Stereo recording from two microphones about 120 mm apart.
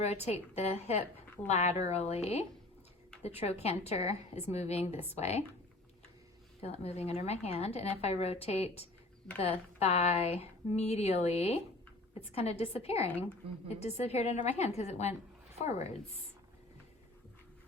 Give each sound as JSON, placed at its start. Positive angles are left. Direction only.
{"t": 0.0, "sound": "a woman's voice", "side_deg": 65}
{"t": 6.6, "sound": "a woman's voice", "side_deg": 60}